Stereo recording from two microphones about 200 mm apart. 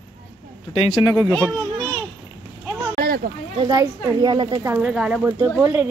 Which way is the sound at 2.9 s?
50° right (ahead or behind).